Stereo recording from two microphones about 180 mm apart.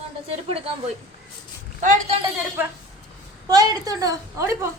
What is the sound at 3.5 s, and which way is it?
A woman's voice, 20° right (ahead or behind).